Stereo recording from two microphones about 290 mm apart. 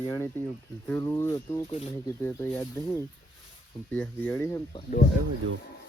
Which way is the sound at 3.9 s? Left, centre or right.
Centre.